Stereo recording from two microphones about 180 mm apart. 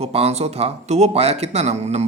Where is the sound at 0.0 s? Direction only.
35° right (ahead or behind).